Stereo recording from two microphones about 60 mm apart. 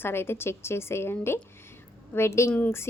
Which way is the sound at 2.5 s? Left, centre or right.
Left.